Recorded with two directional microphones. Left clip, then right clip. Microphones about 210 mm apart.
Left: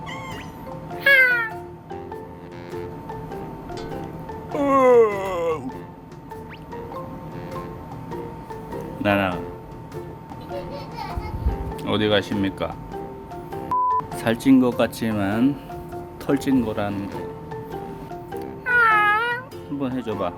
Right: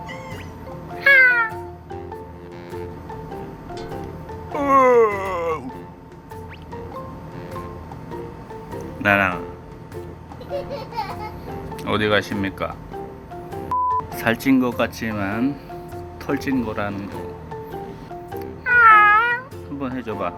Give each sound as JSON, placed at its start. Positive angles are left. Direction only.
{"t": 0.9, "sound": "cat", "side_deg": 10}
{"t": 2.7, "sound": "music", "side_deg": 0}
{"t": 9.0, "sound": "speech", "side_deg": 10}
{"t": 10.5, "sound": "music", "side_deg": 0}
{"t": 13.5, "sound": "music", "side_deg": 0}
{"t": 14.8, "sound": "speech", "side_deg": 20}
{"t": 16.9, "sound": "music", "side_deg": 0}
{"t": 18.3, "sound": "music", "side_deg": 15}